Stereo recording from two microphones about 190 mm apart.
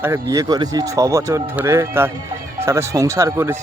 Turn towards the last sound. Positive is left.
turn(degrees=-15)  # may be behind; listen again after turning